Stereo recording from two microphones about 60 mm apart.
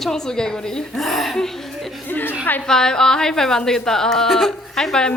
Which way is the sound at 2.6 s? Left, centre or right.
Centre.